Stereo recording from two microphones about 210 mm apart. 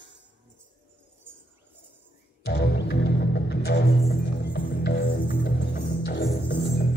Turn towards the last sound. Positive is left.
turn(degrees=50)  # may be behind; listen again after turning